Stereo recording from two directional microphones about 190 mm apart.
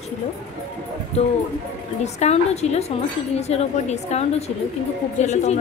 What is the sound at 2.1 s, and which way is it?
A woman's voice, 35° left (ahead or behind).